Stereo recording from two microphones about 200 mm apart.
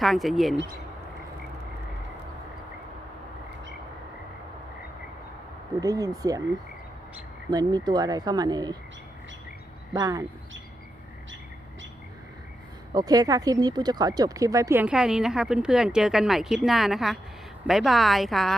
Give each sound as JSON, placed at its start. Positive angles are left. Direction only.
{"t": 0.0, "sound": "speech", "side_deg": 0}
{"t": 5.8, "sound": "speech", "side_deg": -20}
{"t": 7.5, "sound": "speech", "side_deg": -20}
{"t": 9.9, "sound": "speech", "side_deg": -15}
{"t": 12.9, "sound": "speech", "side_deg": -20}